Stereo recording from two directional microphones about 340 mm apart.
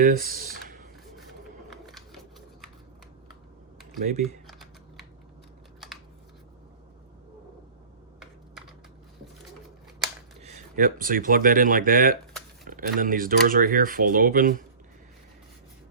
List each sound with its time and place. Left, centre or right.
0.0 s speech: right
0.5 s a sound: right
1.9 s a sound: centre
3.9 s speech: right
4.4 s typing: centre
10.4 s speech: right